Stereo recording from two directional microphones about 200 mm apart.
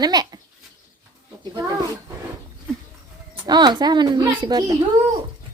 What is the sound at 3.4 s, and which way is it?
A child's voice, 20° right (ahead or behind).